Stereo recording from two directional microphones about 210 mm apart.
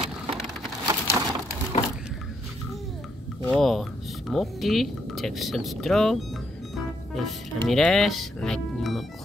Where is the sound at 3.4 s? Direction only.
Centre (ahead or behind).